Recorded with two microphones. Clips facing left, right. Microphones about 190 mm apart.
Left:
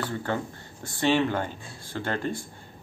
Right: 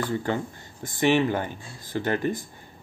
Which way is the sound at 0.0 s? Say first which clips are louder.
Right 3 dB; 15° right (ahead or behind).